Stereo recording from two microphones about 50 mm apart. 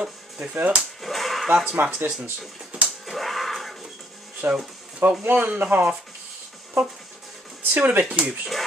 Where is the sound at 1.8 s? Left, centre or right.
Right.